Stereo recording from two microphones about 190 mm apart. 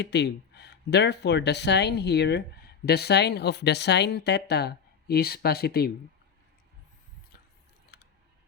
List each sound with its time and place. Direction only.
0.0 s speech: 60° left (ahead or behind)
7.9 s typing: 60° left (ahead or behind)